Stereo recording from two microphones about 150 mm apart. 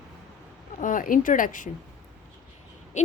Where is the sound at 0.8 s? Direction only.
60° left (ahead or behind).